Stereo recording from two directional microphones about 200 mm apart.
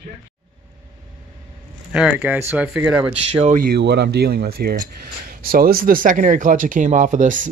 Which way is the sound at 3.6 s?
55° right (ahead or behind).